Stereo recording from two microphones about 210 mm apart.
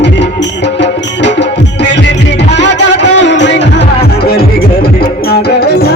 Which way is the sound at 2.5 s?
55° left (ahead or behind).